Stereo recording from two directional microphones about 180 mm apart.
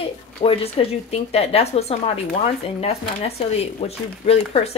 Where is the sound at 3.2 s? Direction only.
35° left (ahead or behind).